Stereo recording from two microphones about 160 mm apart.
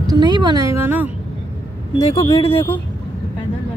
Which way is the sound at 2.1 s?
20° left (ahead or behind).